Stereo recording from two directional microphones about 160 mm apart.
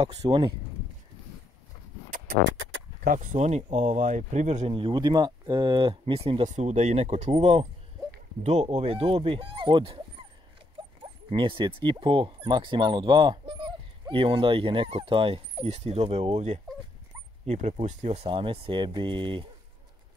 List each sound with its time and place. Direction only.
0.1 s speech: 25° right (ahead or behind)
2.0 s music: 60° right (ahead or behind)
3.0 s speech: 60° right (ahead or behind); by 7.6 s 40° right (ahead or behind)
8.6 s speech: 35° right (ahead or behind)